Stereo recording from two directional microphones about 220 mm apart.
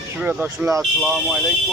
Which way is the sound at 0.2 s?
5° right (ahead or behind).